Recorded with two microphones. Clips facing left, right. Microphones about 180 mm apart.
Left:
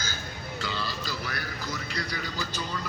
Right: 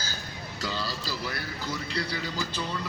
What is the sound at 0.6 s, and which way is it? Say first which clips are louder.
A man's voice: right 1 dB; 35° right (ahead or behind).